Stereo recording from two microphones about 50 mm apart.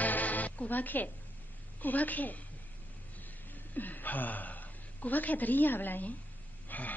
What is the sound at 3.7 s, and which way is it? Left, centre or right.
A woman's voice, left.